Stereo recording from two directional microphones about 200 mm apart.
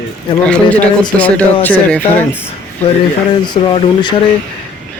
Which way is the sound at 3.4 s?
20° left (ahead or behind).